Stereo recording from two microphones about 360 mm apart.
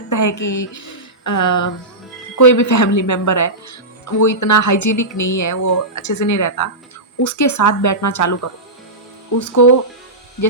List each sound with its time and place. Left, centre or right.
0.1 s speech: left